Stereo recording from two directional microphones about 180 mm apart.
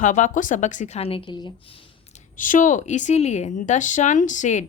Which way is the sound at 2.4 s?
45° left (ahead or behind).